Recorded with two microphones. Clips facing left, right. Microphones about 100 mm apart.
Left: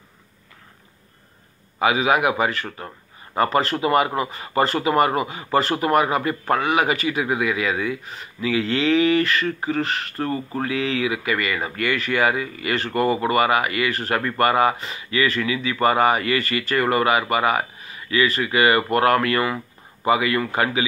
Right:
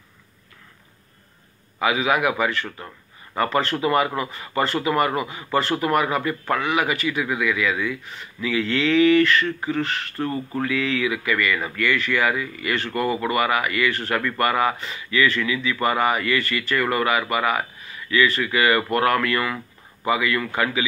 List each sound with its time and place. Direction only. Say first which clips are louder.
1.8 s speech: left 2 dB; 30° left (ahead or behind)